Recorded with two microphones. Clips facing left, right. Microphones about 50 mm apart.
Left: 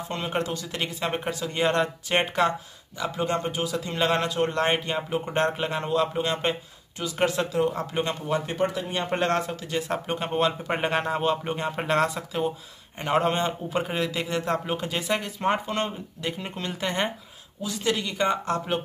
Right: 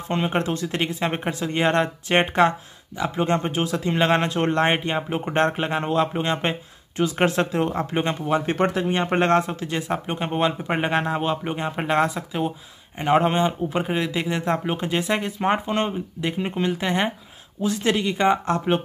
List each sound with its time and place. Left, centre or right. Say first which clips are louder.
0.1 s speech: right 6 dB; right
7.0 s speech: right 5 dB; right
7.9 s speech: right 4 dB; right
8.5 s speech: right 4 dB; right
8.8 s speech: right 5 dB; right
9.8 s a man's voice: even; centre
17.6 s speech: right 5 dB; right
17.9 s speech: right 5 dB; right